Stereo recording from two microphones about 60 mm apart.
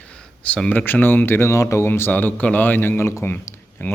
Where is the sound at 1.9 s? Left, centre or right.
Left.